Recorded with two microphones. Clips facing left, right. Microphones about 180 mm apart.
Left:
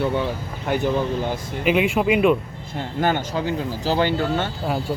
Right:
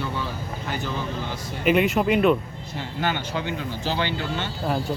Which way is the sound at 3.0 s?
45° left (ahead or behind).